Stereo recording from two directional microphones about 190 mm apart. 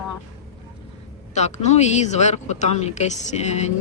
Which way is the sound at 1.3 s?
35° left (ahead or behind).